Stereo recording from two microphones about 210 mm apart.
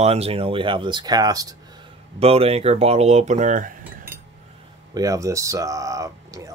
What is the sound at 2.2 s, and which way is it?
Speech, 30° right (ahead or behind).